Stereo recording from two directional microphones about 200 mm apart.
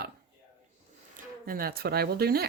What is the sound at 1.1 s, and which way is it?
Speech, 45° right (ahead or behind).